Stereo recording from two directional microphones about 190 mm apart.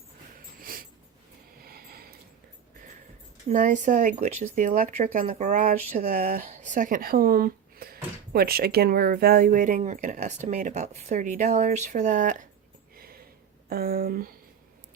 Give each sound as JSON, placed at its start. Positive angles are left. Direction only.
{"t": 0.6, "sound": "a sound", "side_deg": -50}
{"t": 3.5, "sound": "speech", "side_deg": -45}
{"t": 13.7, "sound": "speech", "side_deg": -50}